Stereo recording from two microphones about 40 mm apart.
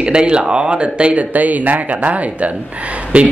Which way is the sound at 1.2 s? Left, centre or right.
Right.